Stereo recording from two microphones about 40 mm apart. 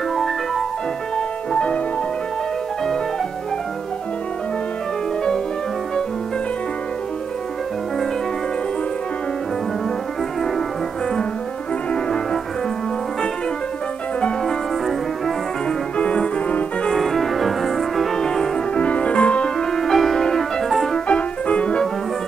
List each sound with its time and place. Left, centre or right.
0.1 s music: centre
1.1 s music: left
11.9 s music: centre
14.4 s music: centre
16.0 s music: left
17.0 s music: centre
18.7 s music: left
19.6 s music: centre
20.9 s music: left